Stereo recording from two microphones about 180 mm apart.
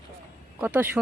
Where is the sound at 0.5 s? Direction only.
10° right (ahead or behind).